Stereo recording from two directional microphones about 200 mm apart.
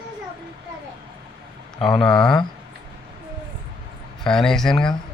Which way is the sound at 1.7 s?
25° left (ahead or behind).